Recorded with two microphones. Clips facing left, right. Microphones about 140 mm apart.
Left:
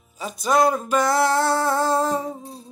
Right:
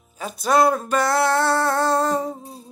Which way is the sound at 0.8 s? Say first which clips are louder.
Even; 10° left (ahead or behind).